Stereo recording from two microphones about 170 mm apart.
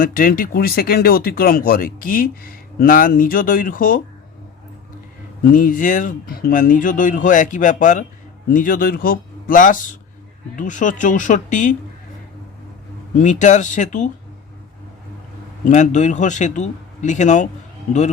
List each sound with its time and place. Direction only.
0.0 s speech: 55° left (ahead or behind)
5.4 s speech: 55° left (ahead or behind)
13.1 s speech: 45° left (ahead or behind)
15.6 s speech: 45° left (ahead or behind)